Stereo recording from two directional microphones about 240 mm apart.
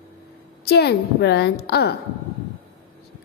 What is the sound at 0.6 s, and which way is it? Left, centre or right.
A woman's voice, left.